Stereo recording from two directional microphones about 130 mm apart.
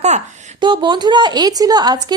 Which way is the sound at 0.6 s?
35° right (ahead or behind).